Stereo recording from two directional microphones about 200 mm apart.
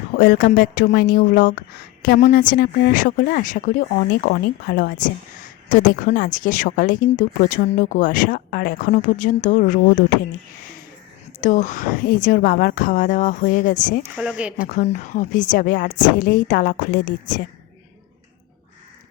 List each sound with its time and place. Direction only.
0.2 s a woman's voice: 45° left (ahead or behind)
11.3 s a woman's voice: 40° left (ahead or behind)
14.2 s speech: 5° right (ahead or behind)
14.6 s a woman's voice: 40° left (ahead or behind)